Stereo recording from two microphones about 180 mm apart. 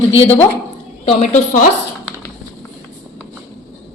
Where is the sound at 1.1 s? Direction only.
40° left (ahead or behind).